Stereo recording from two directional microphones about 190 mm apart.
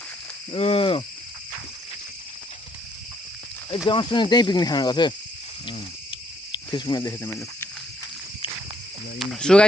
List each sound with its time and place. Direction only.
0.5 s speech: 30° left (ahead or behind)
3.8 s speech: 25° left (ahead or behind)
5.6 s cricket: 25° left (ahead or behind)
9.1 s speech: centre (ahead or behind)